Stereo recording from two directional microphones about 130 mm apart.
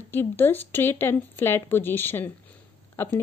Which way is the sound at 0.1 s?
15° left (ahead or behind).